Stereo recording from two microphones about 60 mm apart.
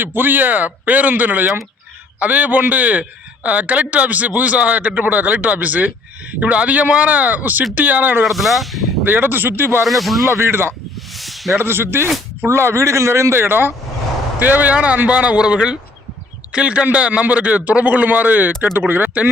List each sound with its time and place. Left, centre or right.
0.0 s a man's voice: right
8.2 s speech: centre
9.0 s speech: right
9.8 s speech: centre
10.2 s speech: right
11.1 s a sound: centre
11.5 s a man's voice: right